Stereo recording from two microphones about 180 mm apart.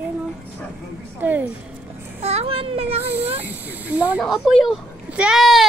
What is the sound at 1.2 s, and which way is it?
Speech, 10° right (ahead or behind).